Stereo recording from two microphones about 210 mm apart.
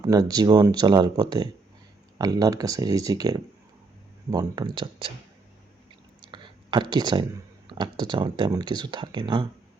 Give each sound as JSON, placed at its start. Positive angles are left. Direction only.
{"t": 0.0, "sound": "speech", "side_deg": -15}
{"t": 6.2, "sound": "a sound", "side_deg": -20}
{"t": 7.7, "sound": "speech", "side_deg": -20}